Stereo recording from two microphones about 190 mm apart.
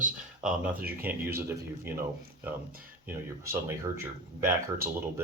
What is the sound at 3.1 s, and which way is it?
Speech, 15° right (ahead or behind).